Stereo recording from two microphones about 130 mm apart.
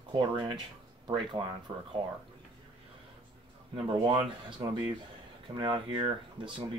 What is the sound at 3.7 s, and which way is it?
Speech, 40° right (ahead or behind).